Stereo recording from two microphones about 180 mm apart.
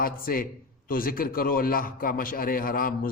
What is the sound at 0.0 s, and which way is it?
A man's voice, 50° left (ahead or behind).